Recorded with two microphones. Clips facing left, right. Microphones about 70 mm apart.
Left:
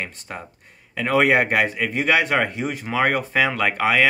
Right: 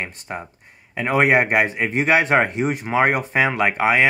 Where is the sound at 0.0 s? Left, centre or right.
Right.